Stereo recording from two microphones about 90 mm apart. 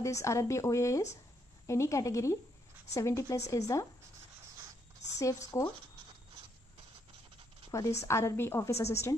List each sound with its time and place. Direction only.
0.0 s a woman's voice: 35° left (ahead or behind)
5.1 s a woman's voice: 35° left (ahead or behind)
7.7 s a woman's voice: 30° left (ahead or behind)